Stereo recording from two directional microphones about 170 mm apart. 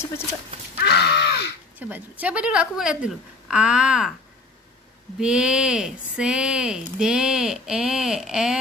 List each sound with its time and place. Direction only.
0.8 s crow: 80° left
1.8 s a woman's voice: 10° right (ahead or behind)
5.2 s a woman's voice: 5° right (ahead or behind)